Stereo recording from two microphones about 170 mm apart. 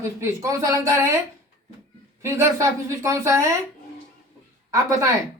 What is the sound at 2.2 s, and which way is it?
Speech, 15° right (ahead or behind).